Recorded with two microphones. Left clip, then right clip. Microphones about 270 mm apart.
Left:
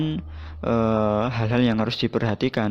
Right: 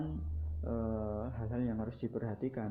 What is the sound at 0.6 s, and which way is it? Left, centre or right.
Speech, left.